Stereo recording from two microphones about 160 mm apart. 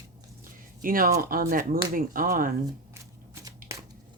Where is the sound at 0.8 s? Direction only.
65° right (ahead or behind).